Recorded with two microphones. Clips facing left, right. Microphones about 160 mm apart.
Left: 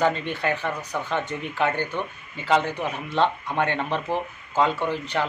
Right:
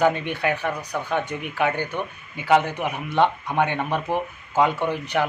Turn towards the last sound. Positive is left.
turn(degrees=-15)  # may be behind; listen again after turning